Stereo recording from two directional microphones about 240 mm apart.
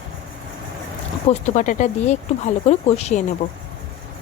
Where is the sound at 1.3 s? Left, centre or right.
Left.